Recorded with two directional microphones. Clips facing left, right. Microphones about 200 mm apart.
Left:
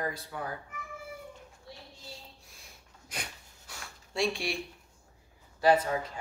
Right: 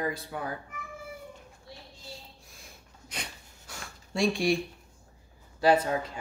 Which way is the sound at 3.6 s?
45° right (ahead or behind).